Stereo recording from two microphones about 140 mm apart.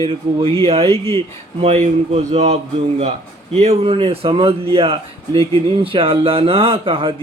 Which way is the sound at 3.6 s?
45° right (ahead or behind).